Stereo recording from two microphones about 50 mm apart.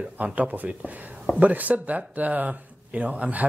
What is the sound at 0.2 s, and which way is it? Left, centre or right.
Speech, right.